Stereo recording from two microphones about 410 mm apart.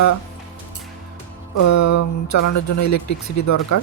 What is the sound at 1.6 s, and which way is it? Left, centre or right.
Speech, left.